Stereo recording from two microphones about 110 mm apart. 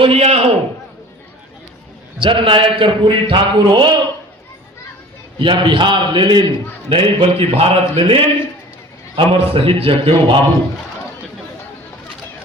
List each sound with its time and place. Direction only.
0.0 s a man's voice: 65° right (ahead or behind)
2.1 s a man's voice: 50° right (ahead or behind)
5.4 s a man's voice: 50° right (ahead or behind)